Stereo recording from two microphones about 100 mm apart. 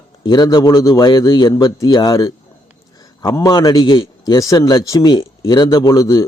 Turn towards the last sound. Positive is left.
turn(degrees=35)  # may be behind; listen again after turning